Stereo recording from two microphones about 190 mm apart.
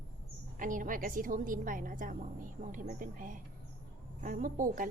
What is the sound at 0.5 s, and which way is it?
A woman's voice, 45° right (ahead or behind).